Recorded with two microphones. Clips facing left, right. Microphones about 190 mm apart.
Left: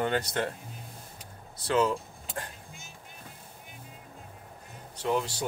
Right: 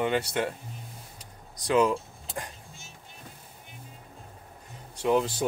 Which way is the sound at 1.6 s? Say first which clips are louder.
Right 3 dB; 15° right (ahead or behind).